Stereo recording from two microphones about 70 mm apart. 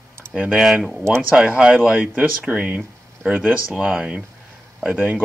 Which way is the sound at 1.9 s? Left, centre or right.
Right.